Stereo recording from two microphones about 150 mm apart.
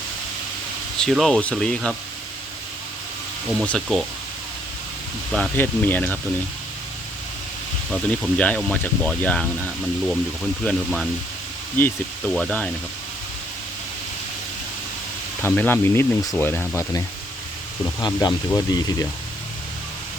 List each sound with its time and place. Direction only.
0.9 s speech: centre (ahead or behind)
3.5 s speech: 5° left (ahead or behind)
5.3 s speech: 10° left (ahead or behind)
7.9 s speech: 5° left (ahead or behind)
10.6 s speech: 10° left (ahead or behind)
15.4 s speech: 15° left (ahead or behind)
17.8 s speech: 30° left (ahead or behind)